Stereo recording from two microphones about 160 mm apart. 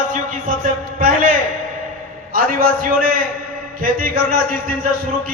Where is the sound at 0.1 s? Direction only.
60° right (ahead or behind).